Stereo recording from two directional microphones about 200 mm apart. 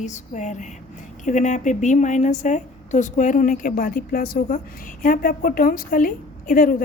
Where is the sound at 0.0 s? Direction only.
35° left (ahead or behind).